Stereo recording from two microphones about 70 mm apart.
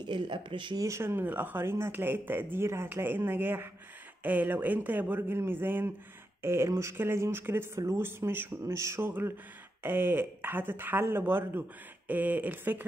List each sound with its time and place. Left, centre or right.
0.0 s speech: right
0.8 s speech: right
9.8 s speech: right